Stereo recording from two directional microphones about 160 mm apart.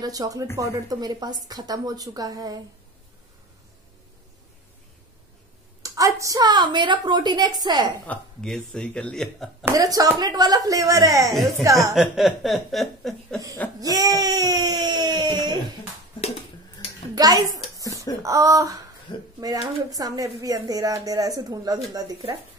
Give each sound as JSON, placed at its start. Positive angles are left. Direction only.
{"t": 0.0, "sound": "speech", "side_deg": -25}
{"t": 5.8, "sound": "speech", "side_deg": -20}
{"t": 8.1, "sound": "speech", "side_deg": 5}
{"t": 9.7, "sound": "speech", "side_deg": -25}
{"t": 11.9, "sound": "speech", "side_deg": 0}
{"t": 13.7, "sound": "speech", "side_deg": -25}
{"t": 17.1, "sound": "a sound", "side_deg": -25}
{"t": 18.2, "sound": "speech", "side_deg": -20}
{"t": 19.1, "sound": "speech", "side_deg": 30}
{"t": 19.4, "sound": "speech", "side_deg": -25}